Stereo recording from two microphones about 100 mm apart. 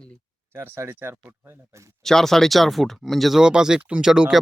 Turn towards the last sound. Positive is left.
turn(degrees=-5)  # may be behind; listen again after turning